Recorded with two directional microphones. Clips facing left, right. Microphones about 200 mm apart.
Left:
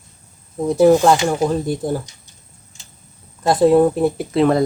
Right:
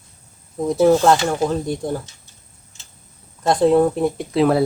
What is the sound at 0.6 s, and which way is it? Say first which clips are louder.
Speech: left 2 dB; centre (ahead or behind).